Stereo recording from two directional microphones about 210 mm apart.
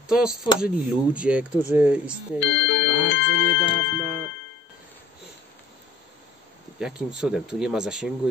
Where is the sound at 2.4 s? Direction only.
60° left (ahead or behind).